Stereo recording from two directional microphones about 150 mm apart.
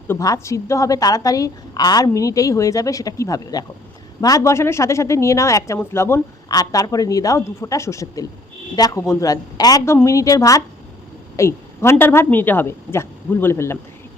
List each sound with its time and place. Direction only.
0.1 s a woman's voice: 20° left (ahead or behind)